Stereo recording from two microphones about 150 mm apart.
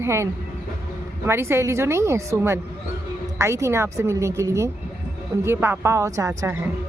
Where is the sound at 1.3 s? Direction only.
15° right (ahead or behind).